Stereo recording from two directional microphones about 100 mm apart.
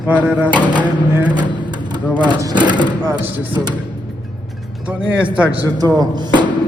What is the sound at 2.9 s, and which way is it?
Speech, 45° right (ahead or behind).